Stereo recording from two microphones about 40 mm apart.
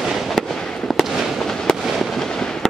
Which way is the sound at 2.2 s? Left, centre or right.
Centre.